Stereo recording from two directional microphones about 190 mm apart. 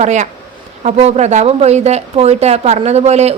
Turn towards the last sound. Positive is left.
turn(degrees=-35)  # may be behind; listen again after turning